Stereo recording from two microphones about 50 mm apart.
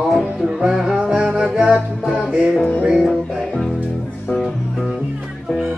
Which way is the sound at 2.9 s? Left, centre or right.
Centre.